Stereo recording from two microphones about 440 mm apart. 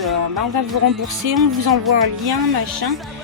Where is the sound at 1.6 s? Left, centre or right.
Right.